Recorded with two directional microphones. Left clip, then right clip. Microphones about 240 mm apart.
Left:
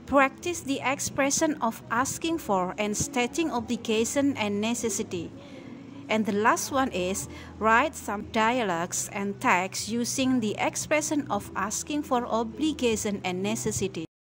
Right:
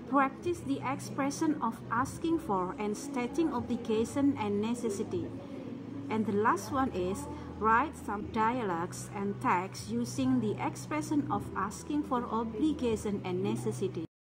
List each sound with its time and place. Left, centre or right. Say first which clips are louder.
0.1 s a woman's voice: left 6 dB; left